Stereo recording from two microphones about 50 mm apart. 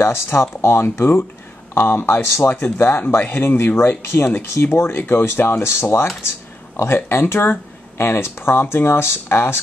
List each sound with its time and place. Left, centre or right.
0.0 s speech: left